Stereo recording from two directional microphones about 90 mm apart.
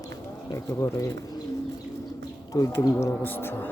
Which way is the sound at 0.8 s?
30° left (ahead or behind).